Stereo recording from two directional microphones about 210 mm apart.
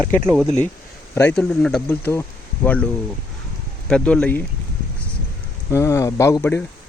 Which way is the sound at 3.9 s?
5° left (ahead or behind).